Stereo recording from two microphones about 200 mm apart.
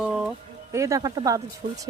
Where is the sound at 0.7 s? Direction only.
15° right (ahead or behind).